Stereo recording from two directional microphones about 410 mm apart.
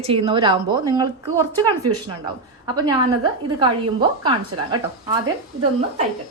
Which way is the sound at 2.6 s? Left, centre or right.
Centre.